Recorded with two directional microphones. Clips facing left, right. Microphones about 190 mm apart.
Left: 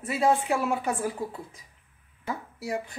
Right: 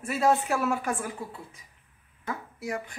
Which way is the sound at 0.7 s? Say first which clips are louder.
Left 2 dB; 25° left (ahead or behind).